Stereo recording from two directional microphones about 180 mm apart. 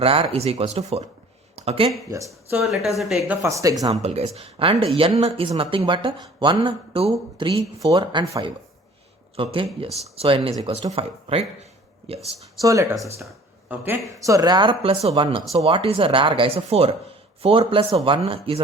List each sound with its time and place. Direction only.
0.0 s speech: 30° right (ahead or behind)
2.0 s speech: 15° right (ahead or behind)
2.6 s speech: centre (ahead or behind)
3.2 s speech: 15° right (ahead or behind)
4.0 s speech: 35° right (ahead or behind)
12.6 s speech: 20° right (ahead or behind)